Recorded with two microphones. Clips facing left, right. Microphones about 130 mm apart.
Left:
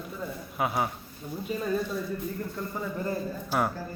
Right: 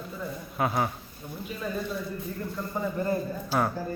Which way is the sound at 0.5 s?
10° left (ahead or behind).